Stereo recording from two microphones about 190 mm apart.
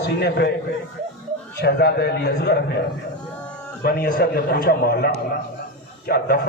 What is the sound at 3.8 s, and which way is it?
A man's voice, 55° left (ahead or behind).